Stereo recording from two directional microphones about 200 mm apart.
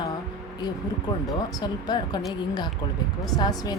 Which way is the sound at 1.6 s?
20° left (ahead or behind).